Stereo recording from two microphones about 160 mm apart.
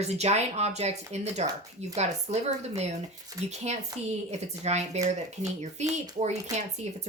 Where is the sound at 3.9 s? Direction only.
20° right (ahead or behind).